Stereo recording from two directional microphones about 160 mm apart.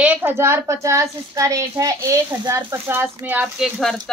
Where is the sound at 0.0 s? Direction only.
10° right (ahead or behind).